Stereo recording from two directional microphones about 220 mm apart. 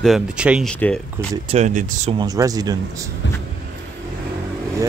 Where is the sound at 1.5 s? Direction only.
30° right (ahead or behind).